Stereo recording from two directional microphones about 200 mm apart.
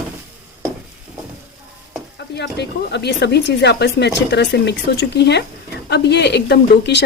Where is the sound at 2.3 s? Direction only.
55° left (ahead or behind).